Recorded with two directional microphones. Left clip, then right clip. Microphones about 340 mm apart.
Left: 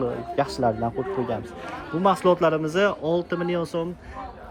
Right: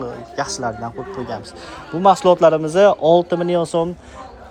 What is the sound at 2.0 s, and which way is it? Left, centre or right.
Speech, centre.